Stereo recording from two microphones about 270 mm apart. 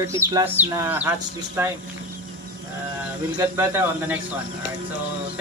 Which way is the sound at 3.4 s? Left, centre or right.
Centre.